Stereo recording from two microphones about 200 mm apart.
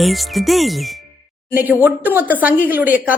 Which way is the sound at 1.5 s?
10° right (ahead or behind).